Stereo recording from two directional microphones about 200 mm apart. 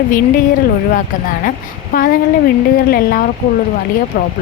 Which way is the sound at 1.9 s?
45° left (ahead or behind).